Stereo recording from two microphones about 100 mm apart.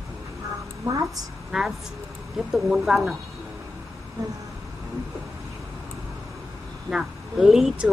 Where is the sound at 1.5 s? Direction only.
5° right (ahead or behind).